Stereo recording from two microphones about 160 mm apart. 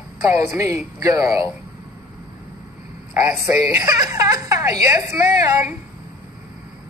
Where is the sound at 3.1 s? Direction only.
15° right (ahead or behind).